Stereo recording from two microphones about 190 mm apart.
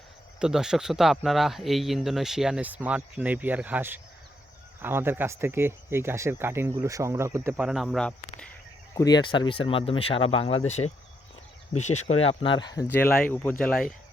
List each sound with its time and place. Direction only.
0.3 s speech: 5° right (ahead or behind)
9.0 s speech: 20° left (ahead or behind)
12.9 s speech: 10° left (ahead or behind)